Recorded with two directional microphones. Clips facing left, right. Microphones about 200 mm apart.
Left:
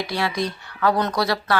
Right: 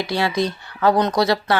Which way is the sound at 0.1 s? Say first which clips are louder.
Right 4 dB; 25° right (ahead or behind).